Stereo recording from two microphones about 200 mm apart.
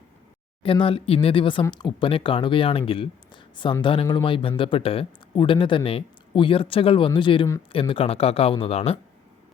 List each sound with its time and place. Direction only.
0.6 s speech: 25° left (ahead or behind)